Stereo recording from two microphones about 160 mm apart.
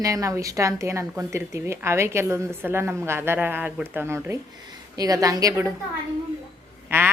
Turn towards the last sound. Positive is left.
turn(degrees=-15)  # may be behind; listen again after turning